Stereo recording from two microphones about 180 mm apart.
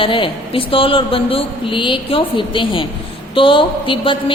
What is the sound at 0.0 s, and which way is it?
A woman's voice, 30° left (ahead or behind).